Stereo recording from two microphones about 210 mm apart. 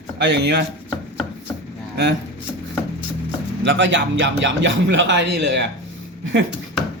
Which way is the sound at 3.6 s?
60° right (ahead or behind).